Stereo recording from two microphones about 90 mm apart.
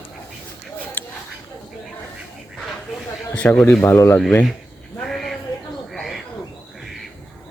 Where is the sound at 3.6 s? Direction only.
20° left (ahead or behind).